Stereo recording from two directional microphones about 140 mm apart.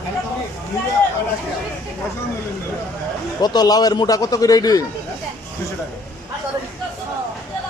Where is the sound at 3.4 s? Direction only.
30° left (ahead or behind).